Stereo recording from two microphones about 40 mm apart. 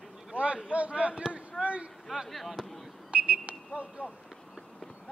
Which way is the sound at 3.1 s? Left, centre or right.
Right.